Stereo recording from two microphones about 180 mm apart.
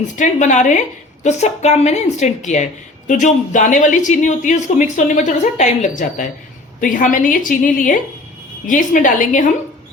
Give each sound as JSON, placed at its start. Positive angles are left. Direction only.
{"t": 0.2, "sound": "a woman's voice", "side_deg": 40}